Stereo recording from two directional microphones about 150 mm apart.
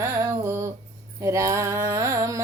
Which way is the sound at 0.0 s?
20° right (ahead or behind).